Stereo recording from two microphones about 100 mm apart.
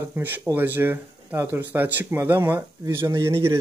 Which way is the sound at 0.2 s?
20° right (ahead or behind).